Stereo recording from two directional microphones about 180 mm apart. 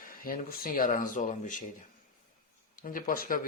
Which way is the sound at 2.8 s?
50° left (ahead or behind).